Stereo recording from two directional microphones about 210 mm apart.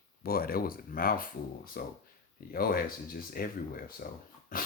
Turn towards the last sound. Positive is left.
turn(degrees=40)  # may be behind; listen again after turning